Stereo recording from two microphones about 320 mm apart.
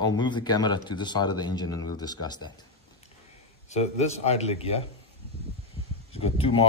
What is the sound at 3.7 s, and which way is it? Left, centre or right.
Speech, centre.